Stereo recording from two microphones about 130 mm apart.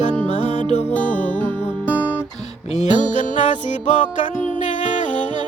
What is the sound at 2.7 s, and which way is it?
Music, 60° left (ahead or behind).